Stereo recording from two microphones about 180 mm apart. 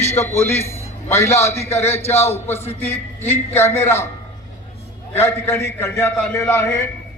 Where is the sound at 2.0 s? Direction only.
15° left (ahead or behind).